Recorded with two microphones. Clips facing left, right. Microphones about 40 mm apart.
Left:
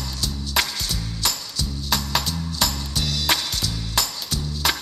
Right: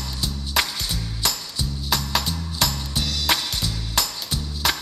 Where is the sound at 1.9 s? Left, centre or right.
Centre.